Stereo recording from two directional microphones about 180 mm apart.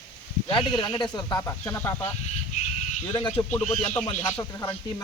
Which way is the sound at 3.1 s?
25° left (ahead or behind).